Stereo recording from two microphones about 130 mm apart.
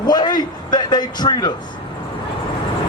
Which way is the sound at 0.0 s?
35° left (ahead or behind).